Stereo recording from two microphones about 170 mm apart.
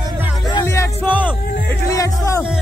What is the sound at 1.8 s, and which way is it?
Speech, 15° left (ahead or behind).